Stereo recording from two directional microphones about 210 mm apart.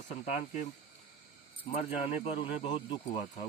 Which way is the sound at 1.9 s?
30° left (ahead or behind).